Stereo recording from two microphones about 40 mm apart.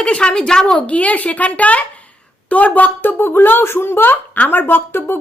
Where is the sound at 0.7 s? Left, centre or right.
Left.